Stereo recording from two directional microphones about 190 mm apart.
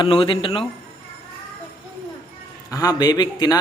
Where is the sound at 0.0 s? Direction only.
30° left (ahead or behind).